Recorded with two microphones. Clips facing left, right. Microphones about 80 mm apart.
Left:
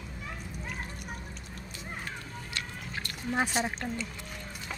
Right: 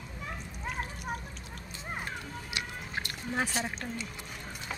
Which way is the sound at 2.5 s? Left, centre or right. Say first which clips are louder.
Right 1 dB; centre.